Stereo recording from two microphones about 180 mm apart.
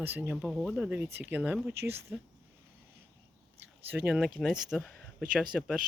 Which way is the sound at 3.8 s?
10° right (ahead or behind).